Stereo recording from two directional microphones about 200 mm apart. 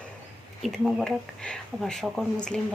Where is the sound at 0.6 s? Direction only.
Centre (ahead or behind).